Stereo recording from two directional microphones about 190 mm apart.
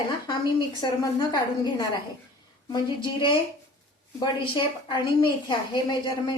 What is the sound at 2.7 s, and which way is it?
A woman's voice, 25° left (ahead or behind).